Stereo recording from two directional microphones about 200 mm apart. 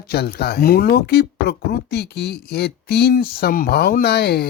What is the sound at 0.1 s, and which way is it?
Speech, 50° left (ahead or behind).